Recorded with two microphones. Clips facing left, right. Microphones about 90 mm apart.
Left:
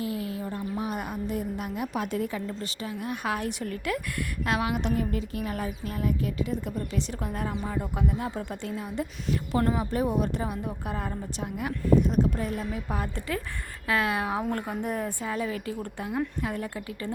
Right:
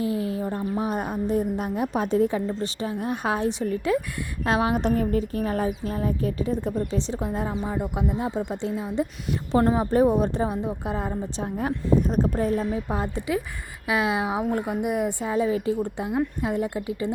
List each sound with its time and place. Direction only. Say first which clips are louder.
0.0 s a woman's voice: right 6 dB; 30° right (ahead or behind)
4.4 s speech: right 6 dB; 35° right (ahead or behind)
12.9 s speech: right 5 dB; 20° right (ahead or behind)